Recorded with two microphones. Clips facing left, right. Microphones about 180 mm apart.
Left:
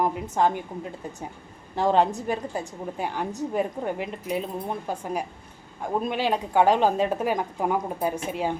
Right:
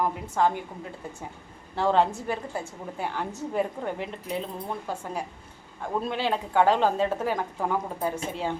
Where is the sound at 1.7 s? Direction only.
15° left (ahead or behind).